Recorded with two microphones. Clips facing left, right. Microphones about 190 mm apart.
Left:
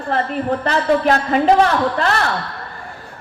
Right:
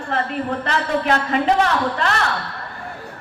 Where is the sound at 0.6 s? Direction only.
40° left (ahead or behind).